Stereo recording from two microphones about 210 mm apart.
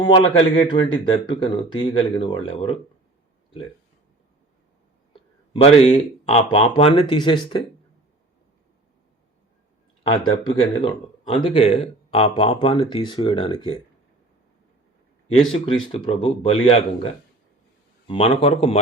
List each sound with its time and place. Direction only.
0.0 s speech: 20° left (ahead or behind)
5.5 s speech: 30° left (ahead or behind)
10.0 s speech: 25° left (ahead or behind)
15.3 s speech: 30° left (ahead or behind)
18.1 s speech: 25° left (ahead or behind)